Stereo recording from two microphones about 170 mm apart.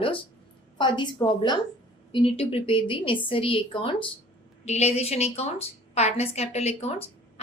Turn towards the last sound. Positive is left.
turn(degrees=40)  # may be behind; listen again after turning